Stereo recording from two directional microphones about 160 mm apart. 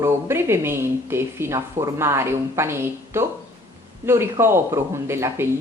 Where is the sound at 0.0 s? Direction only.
15° right (ahead or behind).